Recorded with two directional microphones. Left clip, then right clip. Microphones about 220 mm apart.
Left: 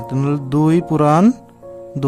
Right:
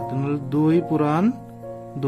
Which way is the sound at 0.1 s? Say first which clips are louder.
Left 5 dB; 50° left (ahead or behind).